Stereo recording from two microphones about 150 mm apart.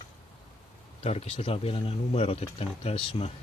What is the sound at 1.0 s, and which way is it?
Speech, 40° left (ahead or behind).